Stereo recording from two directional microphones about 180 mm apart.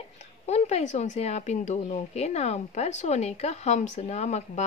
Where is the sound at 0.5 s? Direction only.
35° left (ahead or behind).